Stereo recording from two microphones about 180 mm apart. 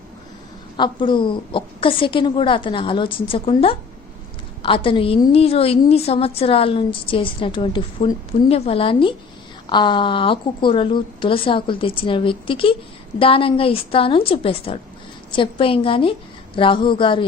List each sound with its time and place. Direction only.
0.8 s a woman's voice: 25° left (ahead or behind)